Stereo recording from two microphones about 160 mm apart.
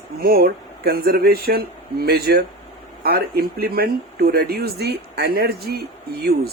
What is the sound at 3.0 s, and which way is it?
Speech, 75° right (ahead or behind).